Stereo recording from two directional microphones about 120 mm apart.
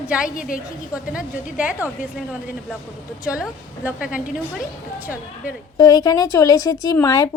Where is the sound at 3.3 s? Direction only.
10° right (ahead or behind).